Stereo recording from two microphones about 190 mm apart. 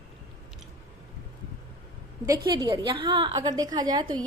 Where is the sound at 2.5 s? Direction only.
20° right (ahead or behind).